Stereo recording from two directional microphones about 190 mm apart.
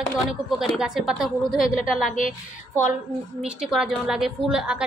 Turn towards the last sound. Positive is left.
turn(degrees=-5)  # may be behind; listen again after turning